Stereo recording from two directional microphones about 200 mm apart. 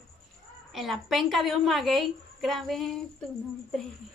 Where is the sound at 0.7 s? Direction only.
Centre (ahead or behind).